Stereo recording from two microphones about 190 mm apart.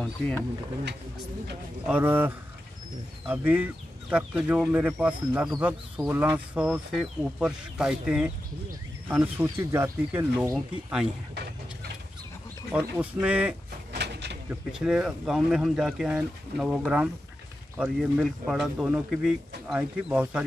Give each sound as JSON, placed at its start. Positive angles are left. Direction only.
{"t": 1.9, "sound": "speech", "side_deg": -10}
{"t": 10.5, "sound": "speech", "side_deg": 0}
{"t": 12.9, "sound": "speech", "side_deg": -10}
{"t": 13.9, "sound": "a sound", "side_deg": -60}
{"t": 14.5, "sound": "speech", "side_deg": -5}